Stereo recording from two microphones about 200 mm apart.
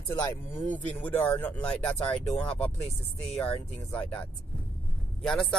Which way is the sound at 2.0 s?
30° left (ahead or behind).